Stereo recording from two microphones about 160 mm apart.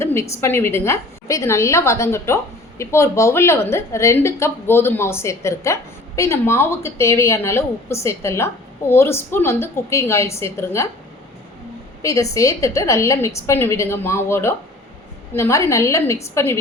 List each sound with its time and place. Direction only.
0.0 s a woman's voice: 15° left (ahead or behind)
12.0 s a woman's voice: 20° left (ahead or behind)